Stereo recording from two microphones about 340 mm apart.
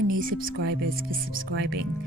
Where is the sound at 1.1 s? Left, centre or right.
Right.